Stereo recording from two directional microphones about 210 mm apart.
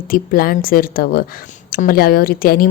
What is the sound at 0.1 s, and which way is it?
A woman's voice, 45° left (ahead or behind).